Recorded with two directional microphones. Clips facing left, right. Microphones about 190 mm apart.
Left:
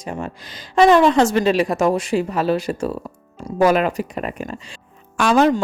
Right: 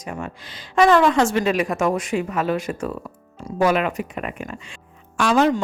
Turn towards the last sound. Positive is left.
turn(degrees=40)  # may be behind; listen again after turning